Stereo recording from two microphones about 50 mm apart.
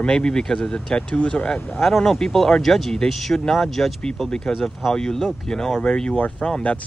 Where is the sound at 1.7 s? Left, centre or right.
Centre.